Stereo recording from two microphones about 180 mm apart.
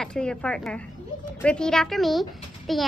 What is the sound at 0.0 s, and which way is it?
A child's voice, 5° left (ahead or behind).